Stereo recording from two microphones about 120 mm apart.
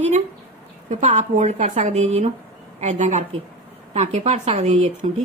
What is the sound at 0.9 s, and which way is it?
Speech, 75° right (ahead or behind).